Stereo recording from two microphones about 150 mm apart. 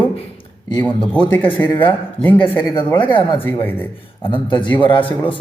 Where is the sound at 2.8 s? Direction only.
15° left (ahead or behind).